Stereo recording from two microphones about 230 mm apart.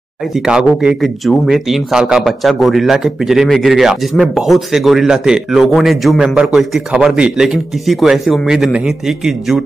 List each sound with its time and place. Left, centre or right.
0.5 s a man's voice: centre